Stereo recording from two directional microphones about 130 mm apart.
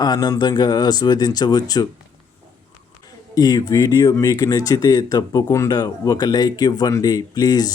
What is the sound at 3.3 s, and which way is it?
Speech, 30° left (ahead or behind).